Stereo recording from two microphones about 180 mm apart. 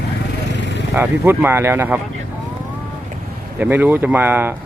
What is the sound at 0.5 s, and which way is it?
Vehicle, 75° left (ahead or behind).